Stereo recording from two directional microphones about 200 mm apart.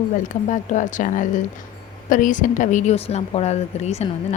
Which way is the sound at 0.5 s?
40° left (ahead or behind).